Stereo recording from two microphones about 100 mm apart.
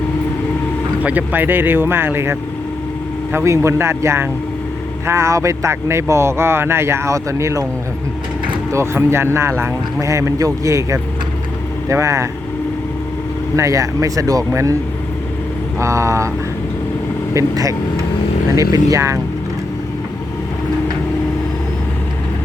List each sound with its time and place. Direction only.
1.0 s speech: 15° right (ahead or behind)
8.7 s speech: 25° right (ahead or behind)
13.6 s speech: 35° right (ahead or behind)
15.8 s speech: 30° right (ahead or behind)
17.3 s speech: 30° right (ahead or behind)